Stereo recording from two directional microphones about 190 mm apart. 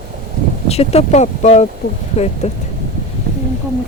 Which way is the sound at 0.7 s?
35° left (ahead or behind).